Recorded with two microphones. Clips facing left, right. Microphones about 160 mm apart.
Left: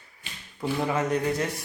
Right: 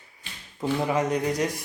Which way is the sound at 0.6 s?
15° right (ahead or behind).